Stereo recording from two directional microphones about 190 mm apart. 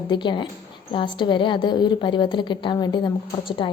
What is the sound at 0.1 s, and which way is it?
A woman's voice, 25° left (ahead or behind).